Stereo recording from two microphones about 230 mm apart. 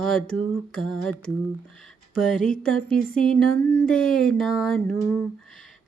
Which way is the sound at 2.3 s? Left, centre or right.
Left.